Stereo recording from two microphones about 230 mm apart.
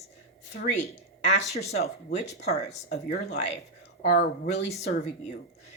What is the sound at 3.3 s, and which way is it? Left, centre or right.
Speech, left.